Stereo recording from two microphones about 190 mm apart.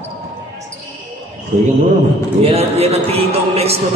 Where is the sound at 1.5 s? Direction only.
35° right (ahead or behind).